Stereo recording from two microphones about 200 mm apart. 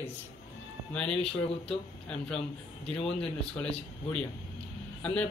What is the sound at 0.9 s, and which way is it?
Speech, 5° left (ahead or behind).